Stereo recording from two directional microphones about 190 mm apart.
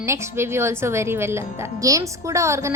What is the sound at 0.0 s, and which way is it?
Speech, 15° right (ahead or behind).